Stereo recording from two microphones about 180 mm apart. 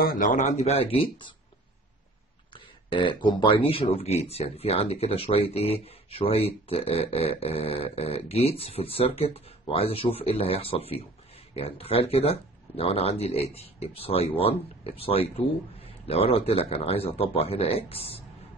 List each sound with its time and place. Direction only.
0.0 s speech: 50° left (ahead or behind); by 1.3 s 30° left (ahead or behind)
2.5 s speech: 30° left (ahead or behind)